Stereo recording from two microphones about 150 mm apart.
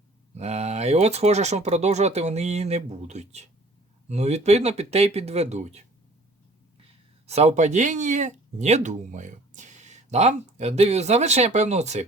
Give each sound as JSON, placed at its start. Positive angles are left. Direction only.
{"t": 0.3, "sound": "speech", "side_deg": -45}
{"t": 7.3, "sound": "speech", "side_deg": -45}